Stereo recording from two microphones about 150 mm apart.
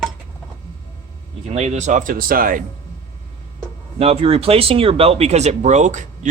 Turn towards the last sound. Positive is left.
turn(degrees=-50)  # may be behind; listen again after turning